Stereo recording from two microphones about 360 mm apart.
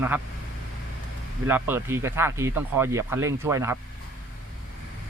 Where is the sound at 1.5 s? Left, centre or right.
Centre.